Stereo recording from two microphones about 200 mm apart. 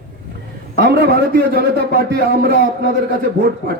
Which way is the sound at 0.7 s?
50° right (ahead or behind).